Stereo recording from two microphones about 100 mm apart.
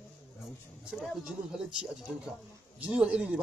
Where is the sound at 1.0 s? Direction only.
5° right (ahead or behind).